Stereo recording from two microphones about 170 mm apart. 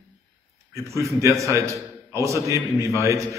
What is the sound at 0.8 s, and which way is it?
A man's voice, 15° right (ahead or behind).